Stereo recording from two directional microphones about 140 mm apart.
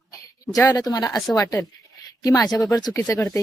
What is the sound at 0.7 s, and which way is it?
Speech, 25° left (ahead or behind).